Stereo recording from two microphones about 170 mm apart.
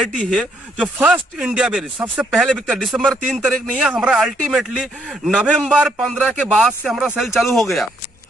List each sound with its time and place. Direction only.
0.3 s a man's voice: 5° right (ahead or behind)